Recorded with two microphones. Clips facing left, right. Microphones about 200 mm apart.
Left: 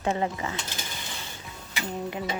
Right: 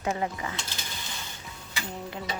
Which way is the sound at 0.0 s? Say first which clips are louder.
Left 2 dB; 30° left (ahead or behind).